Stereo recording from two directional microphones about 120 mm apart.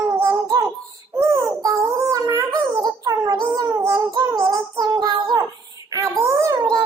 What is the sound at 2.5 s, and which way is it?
Child singing, 35° right (ahead or behind).